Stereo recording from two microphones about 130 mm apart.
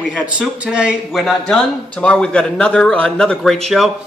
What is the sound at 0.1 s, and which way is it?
Speech, 5° right (ahead or behind).